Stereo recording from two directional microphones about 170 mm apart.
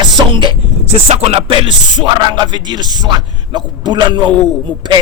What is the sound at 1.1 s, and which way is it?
Speech, 40° right (ahead or behind).